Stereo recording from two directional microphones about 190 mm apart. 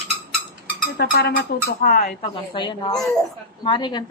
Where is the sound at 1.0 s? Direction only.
55° left (ahead or behind).